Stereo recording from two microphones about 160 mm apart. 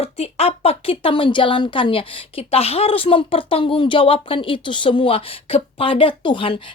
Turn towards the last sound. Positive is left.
turn(degrees=30)  # may be behind; listen again after turning